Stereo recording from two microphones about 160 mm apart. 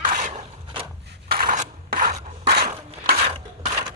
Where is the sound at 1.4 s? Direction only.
55° right (ahead or behind).